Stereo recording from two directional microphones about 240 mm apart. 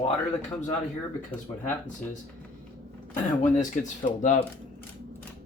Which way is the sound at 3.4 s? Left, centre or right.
Left.